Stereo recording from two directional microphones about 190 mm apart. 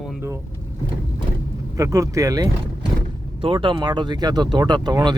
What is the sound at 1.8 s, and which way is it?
Speech, 15° right (ahead or behind).